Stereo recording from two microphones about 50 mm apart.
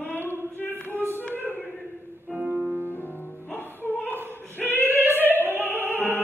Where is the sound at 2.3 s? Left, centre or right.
Right.